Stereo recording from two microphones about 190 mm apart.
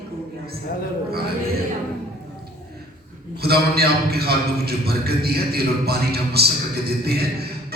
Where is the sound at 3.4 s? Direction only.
55° right (ahead or behind).